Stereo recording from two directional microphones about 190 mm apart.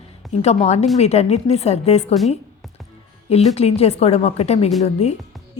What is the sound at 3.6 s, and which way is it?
A woman's voice, 35° left (ahead or behind).